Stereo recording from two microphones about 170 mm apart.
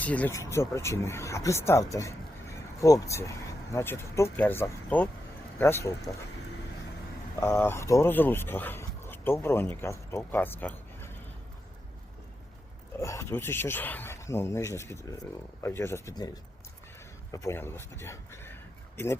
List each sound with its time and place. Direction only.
0.0 s speech: 10° left (ahead or behind)
7.3 s speech: 15° left (ahead or behind)
13.0 s speech: 15° left (ahead or behind)